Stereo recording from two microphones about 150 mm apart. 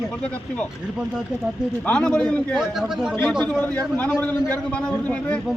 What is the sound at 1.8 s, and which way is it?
A man's voice, 5° left (ahead or behind).